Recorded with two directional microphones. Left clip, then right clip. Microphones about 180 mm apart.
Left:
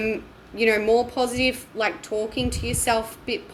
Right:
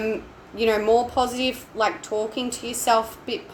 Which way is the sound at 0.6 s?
15° left (ahead or behind).